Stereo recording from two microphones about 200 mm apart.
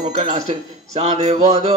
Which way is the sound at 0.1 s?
30° right (ahead or behind).